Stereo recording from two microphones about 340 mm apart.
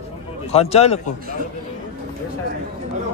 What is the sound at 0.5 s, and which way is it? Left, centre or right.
Speech, centre.